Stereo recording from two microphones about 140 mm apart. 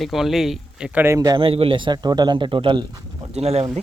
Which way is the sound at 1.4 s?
40° right (ahead or behind).